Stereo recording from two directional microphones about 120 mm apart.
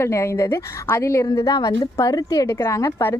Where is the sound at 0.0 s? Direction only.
25° left (ahead or behind).